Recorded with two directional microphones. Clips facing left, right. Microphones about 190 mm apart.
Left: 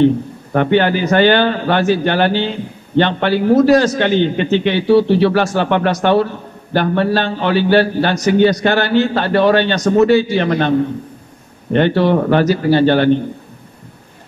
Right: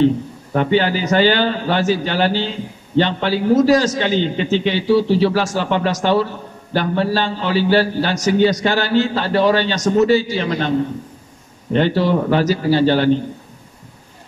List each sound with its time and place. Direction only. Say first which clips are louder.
0.0 s a man's voice: left 3 dB; 60° left (ahead or behind)
11.7 s a man's voice: left 3 dB; 60° left (ahead or behind)